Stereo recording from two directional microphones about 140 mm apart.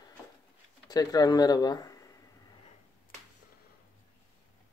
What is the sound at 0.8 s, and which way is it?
Speech, 25° left (ahead or behind).